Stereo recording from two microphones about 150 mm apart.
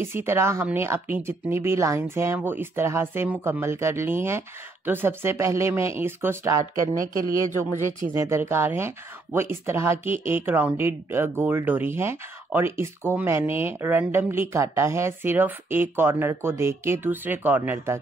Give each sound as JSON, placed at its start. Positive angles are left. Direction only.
{"t": 0.0, "sound": "speech", "side_deg": -15}
{"t": 8.1, "sound": "speech", "side_deg": -15}